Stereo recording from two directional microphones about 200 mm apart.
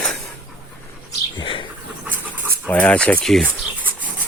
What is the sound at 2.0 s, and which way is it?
Pant, 10° right (ahead or behind).